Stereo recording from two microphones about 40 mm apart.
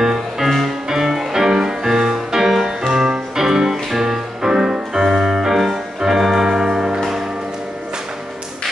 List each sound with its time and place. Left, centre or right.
0.0 s music: centre
5.9 s organ: centre
6.5 s music: centre